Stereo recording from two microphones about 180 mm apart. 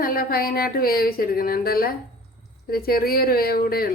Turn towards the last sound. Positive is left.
turn(degrees=55)  # may be behind; listen again after turning